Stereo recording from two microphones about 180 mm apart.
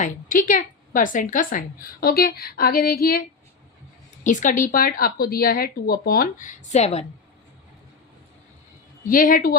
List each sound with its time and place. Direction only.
0.0 s a woman's voice: 50° left (ahead or behind)
4.2 s speech: 45° left (ahead or behind)
9.0 s speech: 50° left (ahead or behind)